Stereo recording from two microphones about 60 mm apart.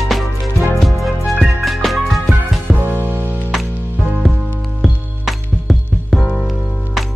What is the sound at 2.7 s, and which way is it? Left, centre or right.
Music, right.